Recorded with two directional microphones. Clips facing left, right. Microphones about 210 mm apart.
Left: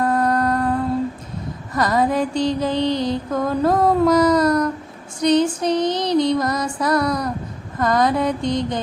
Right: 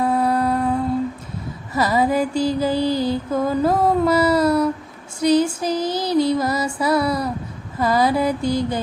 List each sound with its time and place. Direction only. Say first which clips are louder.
0.0 s music: even; 10° right (ahead or behind)
1.7 s mantra: even; 5° right (ahead or behind)
5.2 s female singing: even; 5° right (ahead or behind)
6.7 s mantra: even; 5° right (ahead or behind)